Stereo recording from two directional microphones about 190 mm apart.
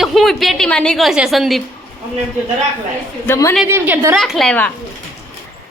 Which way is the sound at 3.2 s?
15° left (ahead or behind).